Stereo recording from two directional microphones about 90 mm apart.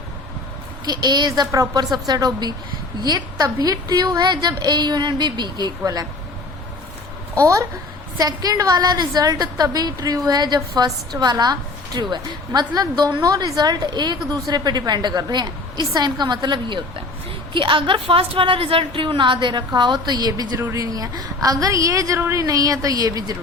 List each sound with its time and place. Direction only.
0.9 s a woman's voice: 50° right (ahead or behind)
7.4 s a woman's voice: 35° right (ahead or behind)
20.6 s a woman's voice: 35° right (ahead or behind)